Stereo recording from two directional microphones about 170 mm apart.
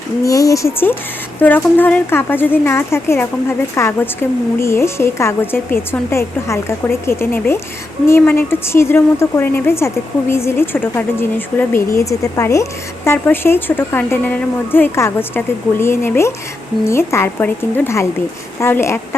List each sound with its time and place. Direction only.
0.3 s a woman's voice: 20° left (ahead or behind)